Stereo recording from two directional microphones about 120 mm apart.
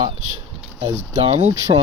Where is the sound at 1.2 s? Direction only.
55° right (ahead or behind).